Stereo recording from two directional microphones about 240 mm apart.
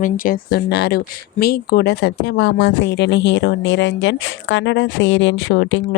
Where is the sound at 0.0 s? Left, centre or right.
Left.